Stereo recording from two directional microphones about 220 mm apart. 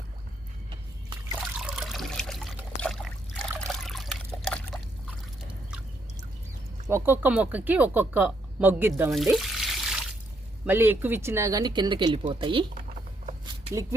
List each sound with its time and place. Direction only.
1.5 s trickle: 5° right (ahead or behind)
6.8 s speech: 10° right (ahead or behind)